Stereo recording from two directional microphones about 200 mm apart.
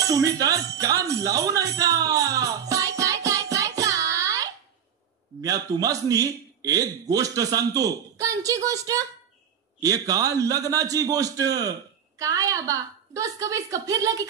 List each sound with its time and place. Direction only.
0.0 s music: 15° right (ahead or behind)
5.4 s a man's voice: 15° right (ahead or behind)